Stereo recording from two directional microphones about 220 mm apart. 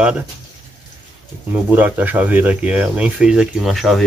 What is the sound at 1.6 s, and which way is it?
Speech, 10° right (ahead or behind).